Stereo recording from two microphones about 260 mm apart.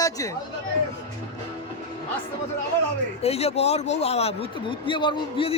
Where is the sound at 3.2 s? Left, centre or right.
Left.